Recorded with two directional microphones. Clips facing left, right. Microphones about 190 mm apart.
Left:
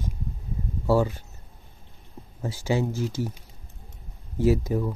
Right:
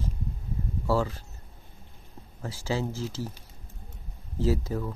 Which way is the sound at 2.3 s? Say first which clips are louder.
Left 5 dB; 20° left (ahead or behind).